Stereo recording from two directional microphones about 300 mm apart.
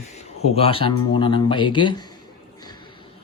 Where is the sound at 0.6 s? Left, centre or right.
Centre.